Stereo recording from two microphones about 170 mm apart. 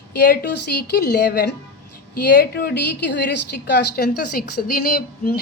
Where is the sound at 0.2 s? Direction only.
70° left (ahead or behind).